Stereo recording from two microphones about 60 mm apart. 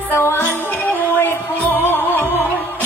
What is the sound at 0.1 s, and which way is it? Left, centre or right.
Music, left.